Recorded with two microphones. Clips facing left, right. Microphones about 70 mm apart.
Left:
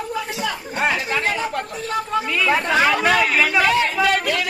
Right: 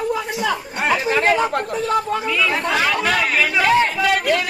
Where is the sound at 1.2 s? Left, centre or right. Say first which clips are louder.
Right 5 dB; right.